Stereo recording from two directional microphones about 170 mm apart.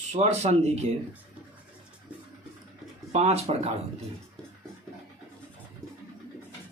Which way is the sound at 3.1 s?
40° right (ahead or behind).